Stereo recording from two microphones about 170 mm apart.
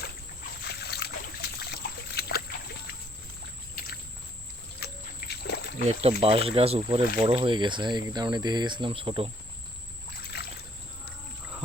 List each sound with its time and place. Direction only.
0.6 s trickle: 75° left (ahead or behind)
4.8 s a sound: 70° left (ahead or behind)
5.4 s rowboat: 75° left (ahead or behind)
5.8 s speech: 35° right (ahead or behind)
10.3 s boat: 70° left (ahead or behind)